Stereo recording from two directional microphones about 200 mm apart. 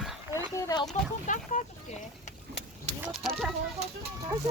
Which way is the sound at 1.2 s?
35° left (ahead or behind).